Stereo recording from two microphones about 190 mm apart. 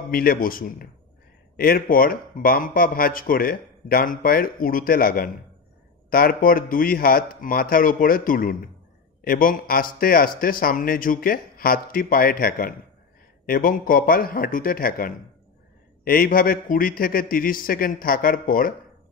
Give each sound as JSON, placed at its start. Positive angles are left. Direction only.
{"t": 0.1, "sound": "a man's voice", "side_deg": 50}